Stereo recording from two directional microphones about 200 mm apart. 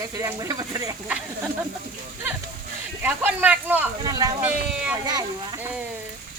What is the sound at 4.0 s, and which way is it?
Speech, 20° right (ahead or behind).